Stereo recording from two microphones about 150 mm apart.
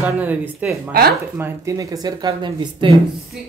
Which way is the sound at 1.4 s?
20° right (ahead or behind).